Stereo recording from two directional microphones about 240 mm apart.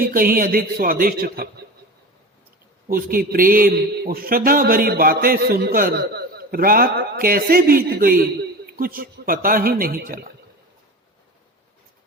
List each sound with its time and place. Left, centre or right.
0.0 s a man's voice: right
2.8 s a man's voice: right